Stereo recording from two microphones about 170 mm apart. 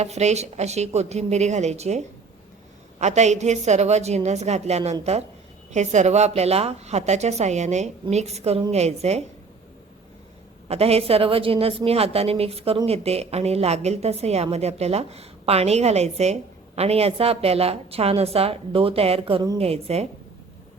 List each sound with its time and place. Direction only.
0.0 s a woman's voice: 40° right (ahead or behind)
10.7 s a woman's voice: 35° right (ahead or behind)